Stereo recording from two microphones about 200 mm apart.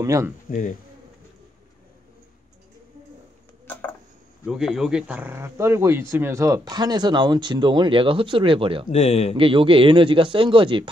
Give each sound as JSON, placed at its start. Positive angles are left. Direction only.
{"t": 0.0, "sound": "speech", "side_deg": -15}
{"t": 0.5, "sound": "speech", "side_deg": 40}
{"t": 4.5, "sound": "speech", "side_deg": 0}
{"t": 8.9, "sound": "speech", "side_deg": 30}
{"t": 9.3, "sound": "speech", "side_deg": -25}